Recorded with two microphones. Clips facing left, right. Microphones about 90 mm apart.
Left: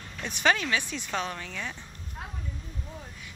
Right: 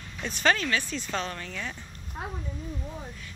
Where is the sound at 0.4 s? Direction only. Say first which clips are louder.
Even; 10° left (ahead or behind).